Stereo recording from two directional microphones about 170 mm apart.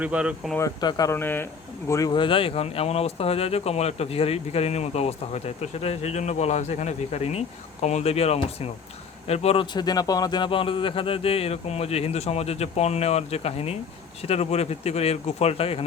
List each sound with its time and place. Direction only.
0.0 s speech: 5° right (ahead or behind)
0.5 s speech: 20° left (ahead or behind); by 9.6 s 40° left (ahead or behind)
9.7 s speech: 25° left (ahead or behind)